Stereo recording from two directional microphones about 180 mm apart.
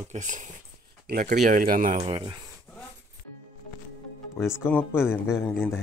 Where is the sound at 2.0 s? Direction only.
30° right (ahead or behind).